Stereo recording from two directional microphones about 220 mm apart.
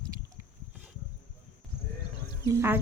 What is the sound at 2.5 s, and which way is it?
Speech, 10° right (ahead or behind).